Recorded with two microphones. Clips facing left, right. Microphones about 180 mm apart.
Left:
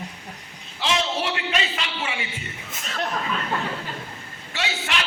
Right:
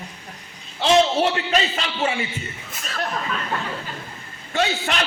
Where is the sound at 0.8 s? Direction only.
40° right (ahead or behind).